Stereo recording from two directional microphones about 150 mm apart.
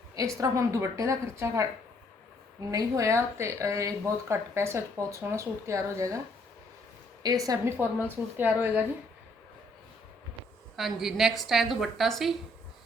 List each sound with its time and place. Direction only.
0.3 s speech: 20° right (ahead or behind)
7.2 s speech: 25° right (ahead or behind)
8.4 s a woman's voice: 10° right (ahead or behind)
10.8 s a woman's voice: centre (ahead or behind)